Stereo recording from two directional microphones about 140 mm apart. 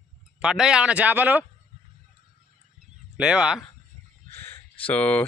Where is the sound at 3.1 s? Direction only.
5° right (ahead or behind).